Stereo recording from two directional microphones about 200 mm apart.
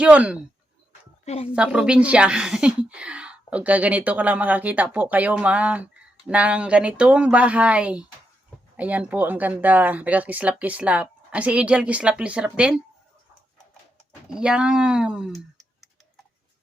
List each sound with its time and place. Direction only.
0.0 s a woman's voice: 5° right (ahead or behind)
1.2 s a woman's voice: 30° left (ahead or behind)
1.5 s a woman's voice: 5° right (ahead or behind)
14.3 s speech: 5° right (ahead or behind)